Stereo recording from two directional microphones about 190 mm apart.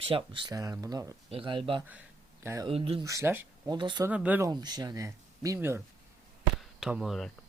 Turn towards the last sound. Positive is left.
turn(degrees=0)  # may be behind; listen again after turning